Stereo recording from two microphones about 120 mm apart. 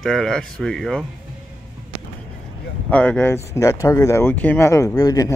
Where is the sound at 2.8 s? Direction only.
10° left (ahead or behind); by 5.4 s 30° left (ahead or behind).